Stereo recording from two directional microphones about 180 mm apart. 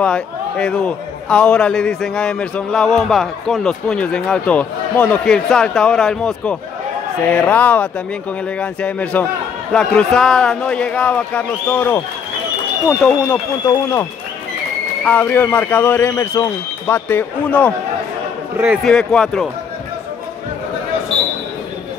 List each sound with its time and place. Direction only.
0.0 s a man's voice: 5° left (ahead or behind)
13.0 s a man's voice: 15° left (ahead or behind)
15.0 s a man's voice: 10° left (ahead or behind)
18.9 s a man's voice: 5° left (ahead or behind)